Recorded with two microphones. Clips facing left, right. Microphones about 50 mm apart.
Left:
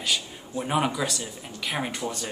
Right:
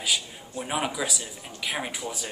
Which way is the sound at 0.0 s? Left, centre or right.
Centre.